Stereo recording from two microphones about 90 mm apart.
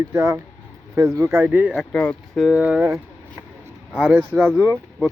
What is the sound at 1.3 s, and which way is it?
Speech, 20° right (ahead or behind).